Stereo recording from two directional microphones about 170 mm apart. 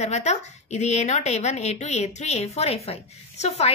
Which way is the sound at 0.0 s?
40° left (ahead or behind).